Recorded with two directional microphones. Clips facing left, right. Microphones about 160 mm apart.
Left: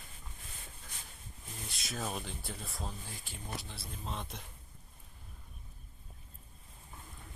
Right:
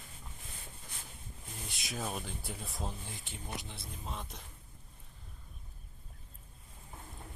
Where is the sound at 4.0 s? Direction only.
10° right (ahead or behind).